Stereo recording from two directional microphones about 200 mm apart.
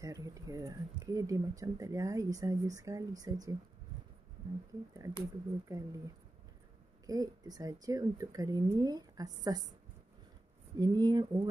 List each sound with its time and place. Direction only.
0.0 s speech: 15° right (ahead or behind)
4.9 s speech: 15° right (ahead or behind)
10.8 s speech: 20° right (ahead or behind)